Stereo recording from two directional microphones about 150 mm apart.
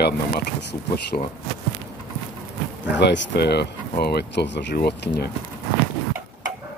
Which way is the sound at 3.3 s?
90° left.